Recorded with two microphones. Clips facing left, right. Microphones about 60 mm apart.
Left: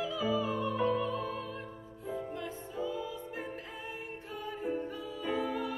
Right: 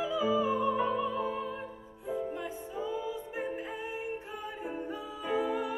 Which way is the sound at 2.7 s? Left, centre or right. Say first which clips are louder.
Right 1 dB; centre.